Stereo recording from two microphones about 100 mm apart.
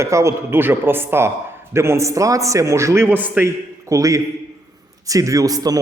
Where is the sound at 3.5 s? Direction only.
30° right (ahead or behind).